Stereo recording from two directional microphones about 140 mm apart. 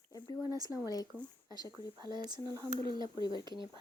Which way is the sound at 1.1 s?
10° left (ahead or behind).